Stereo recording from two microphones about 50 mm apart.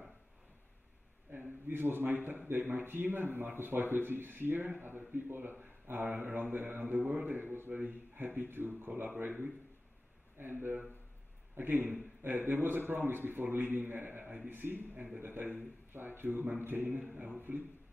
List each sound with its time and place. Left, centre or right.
1.3 s a sound: right
1.7 s a man's voice: right
10.3 s a man's voice: right